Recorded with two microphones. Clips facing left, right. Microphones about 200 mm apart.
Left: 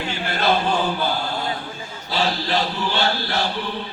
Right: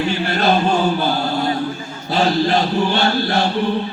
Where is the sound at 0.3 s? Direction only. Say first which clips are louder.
Right 2 dB; 50° right (ahead or behind).